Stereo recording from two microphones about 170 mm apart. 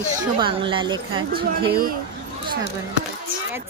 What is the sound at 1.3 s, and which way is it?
Speech, 60° right (ahead or behind).